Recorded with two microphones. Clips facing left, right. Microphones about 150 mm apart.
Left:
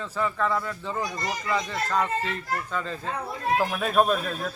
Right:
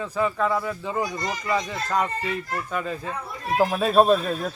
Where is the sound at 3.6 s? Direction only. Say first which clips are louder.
Right 6 dB; 25° right (ahead or behind).